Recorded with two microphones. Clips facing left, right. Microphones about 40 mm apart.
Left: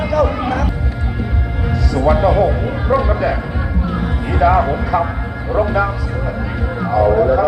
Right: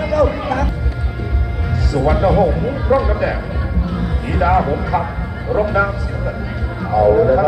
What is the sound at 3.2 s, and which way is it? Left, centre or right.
Music, centre.